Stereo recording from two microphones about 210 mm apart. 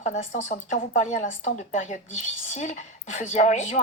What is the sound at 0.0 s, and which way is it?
Speech, 35° left (ahead or behind).